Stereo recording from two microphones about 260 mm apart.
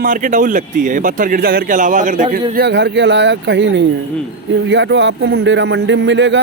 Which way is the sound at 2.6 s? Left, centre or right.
Right.